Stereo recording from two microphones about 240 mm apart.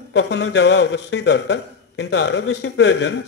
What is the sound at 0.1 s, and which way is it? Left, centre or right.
A man's voice, left.